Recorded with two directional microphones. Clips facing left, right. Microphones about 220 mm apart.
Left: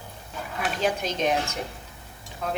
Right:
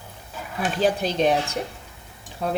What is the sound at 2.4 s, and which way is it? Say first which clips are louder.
Speech: right 4 dB; 35° right (ahead or behind).